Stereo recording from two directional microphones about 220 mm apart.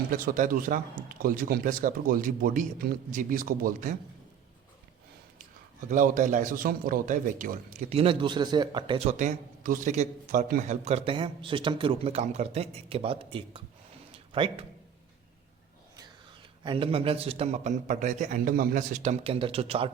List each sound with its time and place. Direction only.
0.1 s speech: 40° right (ahead or behind)
5.9 s speech: 35° right (ahead or behind)
7.9 s a man's voice: 25° right (ahead or behind)
14.1 s a sound: 25° right (ahead or behind)
16.6 s a man's voice: 25° right (ahead or behind)